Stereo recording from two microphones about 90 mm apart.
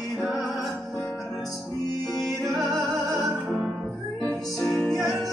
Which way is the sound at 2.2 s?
Centre (ahead or behind).